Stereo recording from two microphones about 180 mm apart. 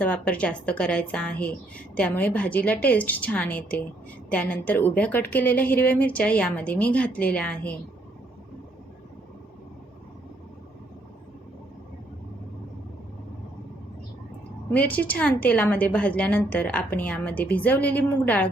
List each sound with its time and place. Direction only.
0.0 s a woman's voice: 5° left (ahead or behind)
14.7 s a woman's voice: 10° left (ahead or behind)